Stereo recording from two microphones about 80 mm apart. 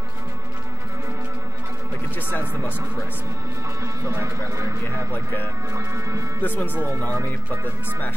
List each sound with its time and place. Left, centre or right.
3.8 s speech: right
5.1 s speech: left
5.7 s speech: right
6.4 s speech: left